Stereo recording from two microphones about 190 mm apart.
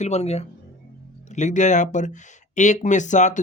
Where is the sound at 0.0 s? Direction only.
35° left (ahead or behind).